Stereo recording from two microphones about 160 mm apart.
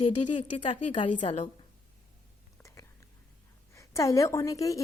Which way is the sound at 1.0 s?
35° left (ahead or behind).